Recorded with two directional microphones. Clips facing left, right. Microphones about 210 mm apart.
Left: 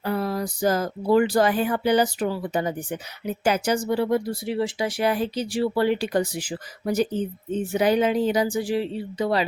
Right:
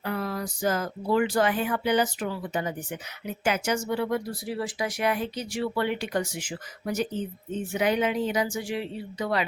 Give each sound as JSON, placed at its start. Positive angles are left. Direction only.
{"t": 0.0, "sound": "speech", "side_deg": 35}